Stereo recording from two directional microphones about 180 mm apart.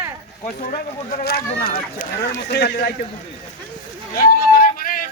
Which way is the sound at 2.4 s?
70° left (ahead or behind).